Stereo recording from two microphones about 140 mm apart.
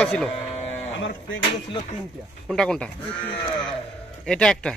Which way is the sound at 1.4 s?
40° left (ahead or behind).